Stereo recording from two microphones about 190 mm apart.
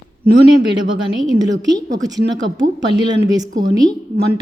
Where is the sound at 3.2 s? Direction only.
20° right (ahead or behind).